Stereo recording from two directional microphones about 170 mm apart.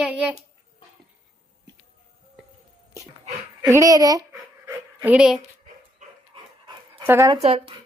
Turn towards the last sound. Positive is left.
turn(degrees=-35)  # may be behind; listen again after turning